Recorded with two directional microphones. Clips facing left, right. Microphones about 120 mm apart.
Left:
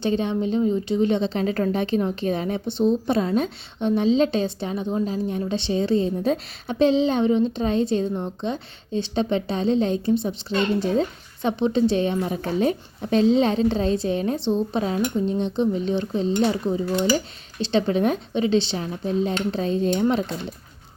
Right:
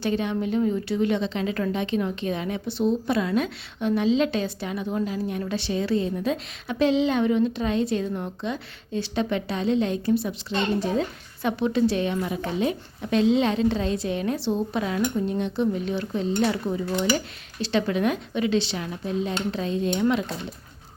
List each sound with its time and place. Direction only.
0.0 s a woman's voice: 30° left (ahead or behind)
11.4 s a woman's voice: 25° left (ahead or behind)